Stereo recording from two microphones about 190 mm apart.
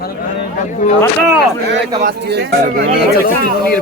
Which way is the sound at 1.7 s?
60° right (ahead or behind).